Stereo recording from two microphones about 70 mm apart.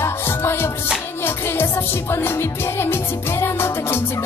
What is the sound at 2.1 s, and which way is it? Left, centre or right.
Music, left.